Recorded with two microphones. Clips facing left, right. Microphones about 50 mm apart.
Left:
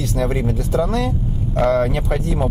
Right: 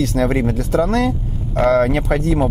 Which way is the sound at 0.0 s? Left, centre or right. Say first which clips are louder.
Right 4 dB; right.